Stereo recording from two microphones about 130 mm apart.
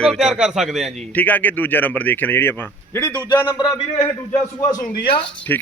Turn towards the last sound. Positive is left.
turn(degrees=15)  # may be behind; listen again after turning